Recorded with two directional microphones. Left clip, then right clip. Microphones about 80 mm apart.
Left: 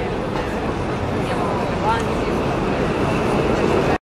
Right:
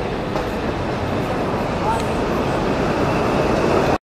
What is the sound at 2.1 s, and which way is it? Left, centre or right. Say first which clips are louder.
Vehicle: right 1 dB; right.